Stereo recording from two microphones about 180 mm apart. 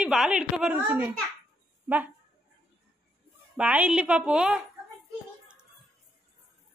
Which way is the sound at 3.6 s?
5° right (ahead or behind).